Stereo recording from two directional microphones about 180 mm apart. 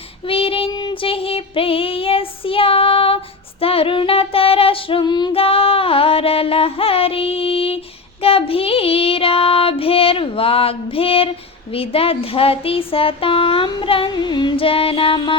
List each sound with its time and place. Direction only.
0.3 s child singing: 30° left (ahead or behind)
3.6 s female singing: 30° left (ahead or behind)
8.2 s child singing: 30° left (ahead or behind)